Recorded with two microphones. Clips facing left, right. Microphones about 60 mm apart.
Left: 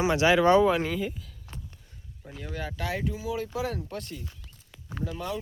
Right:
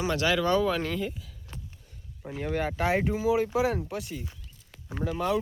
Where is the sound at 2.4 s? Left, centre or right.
Right; by 3.9 s centre.